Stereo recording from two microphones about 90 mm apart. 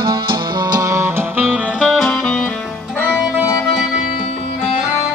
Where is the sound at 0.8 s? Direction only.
35° right (ahead or behind).